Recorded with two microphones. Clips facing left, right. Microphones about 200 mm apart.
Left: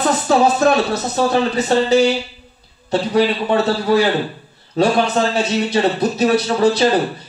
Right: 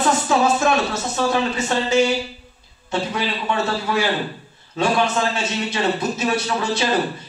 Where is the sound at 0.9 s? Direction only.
35° left (ahead or behind).